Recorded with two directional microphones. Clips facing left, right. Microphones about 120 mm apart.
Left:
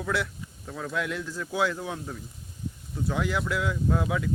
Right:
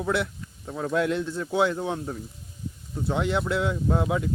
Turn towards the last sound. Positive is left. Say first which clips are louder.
# right 2 dB
turn(degrees=-30)  # may be behind; listen again after turning